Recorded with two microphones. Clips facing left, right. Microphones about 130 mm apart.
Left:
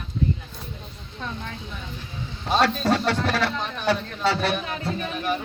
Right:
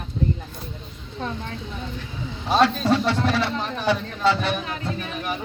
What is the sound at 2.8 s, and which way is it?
Speech, 45° left (ahead or behind).